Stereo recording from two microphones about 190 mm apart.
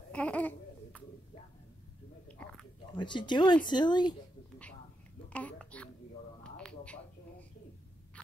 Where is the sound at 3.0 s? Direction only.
25° left (ahead or behind).